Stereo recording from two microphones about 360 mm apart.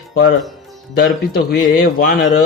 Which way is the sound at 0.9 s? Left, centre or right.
Left.